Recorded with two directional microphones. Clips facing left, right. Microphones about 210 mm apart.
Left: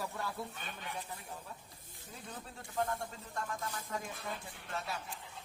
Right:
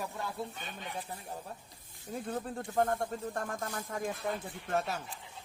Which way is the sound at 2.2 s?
50° right (ahead or behind).